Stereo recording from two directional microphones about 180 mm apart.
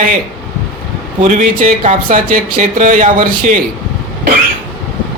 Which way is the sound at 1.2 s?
45° right (ahead or behind).